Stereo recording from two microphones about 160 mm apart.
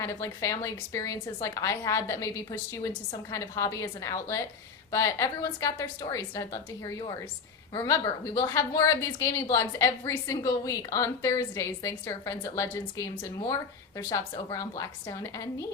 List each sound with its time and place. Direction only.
0.0 s a woman's voice: 20° left (ahead or behind)